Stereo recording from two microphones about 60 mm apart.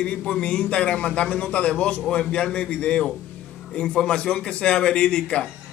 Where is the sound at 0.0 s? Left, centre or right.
Centre.